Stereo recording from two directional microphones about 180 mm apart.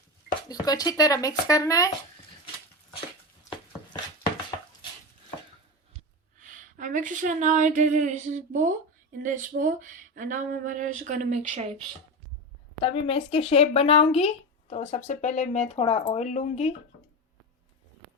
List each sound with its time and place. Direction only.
0.4 s speech: 20° left (ahead or behind)
6.7 s speech: 45° right (ahead or behind)
12.8 s speech: 30° left (ahead or behind)